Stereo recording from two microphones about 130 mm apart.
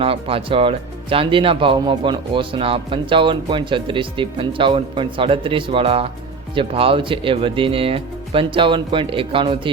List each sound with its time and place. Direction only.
0.0 s speech: 45° right (ahead or behind)